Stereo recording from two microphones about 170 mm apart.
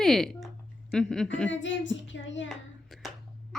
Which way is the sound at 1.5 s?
90° left.